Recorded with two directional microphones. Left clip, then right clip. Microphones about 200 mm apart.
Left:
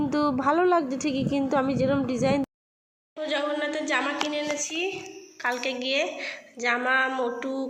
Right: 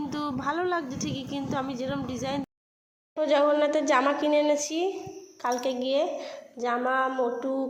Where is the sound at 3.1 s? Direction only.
25° right (ahead or behind).